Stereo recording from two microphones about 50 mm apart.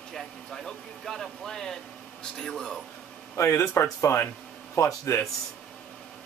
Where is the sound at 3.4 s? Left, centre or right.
Left.